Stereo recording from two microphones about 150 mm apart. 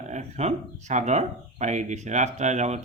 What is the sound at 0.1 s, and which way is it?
A man's voice, 45° right (ahead or behind).